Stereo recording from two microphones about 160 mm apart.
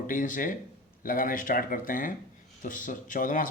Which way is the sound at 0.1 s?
55° left (ahead or behind).